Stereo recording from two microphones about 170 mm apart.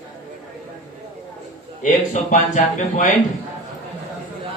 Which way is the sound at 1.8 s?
45° left (ahead or behind).